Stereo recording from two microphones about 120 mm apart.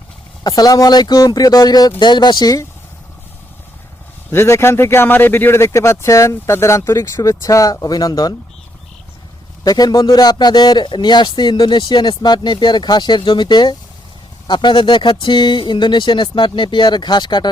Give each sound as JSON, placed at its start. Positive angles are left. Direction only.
{"t": 0.4, "sound": "speech", "side_deg": 30}
{"t": 4.3, "sound": "speech", "side_deg": 20}
{"t": 9.6, "sound": "speech", "side_deg": 35}